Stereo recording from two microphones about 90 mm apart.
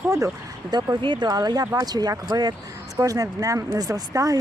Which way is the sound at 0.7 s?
50° right (ahead or behind).